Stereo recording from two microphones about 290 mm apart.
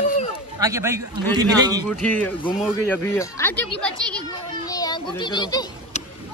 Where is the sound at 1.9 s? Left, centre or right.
Centre.